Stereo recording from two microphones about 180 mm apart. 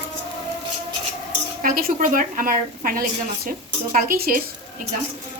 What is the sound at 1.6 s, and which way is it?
A woman's voice, 50° right (ahead or behind).